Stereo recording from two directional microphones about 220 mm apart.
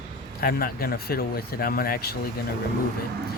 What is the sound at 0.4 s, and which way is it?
Speech, 45° left (ahead or behind).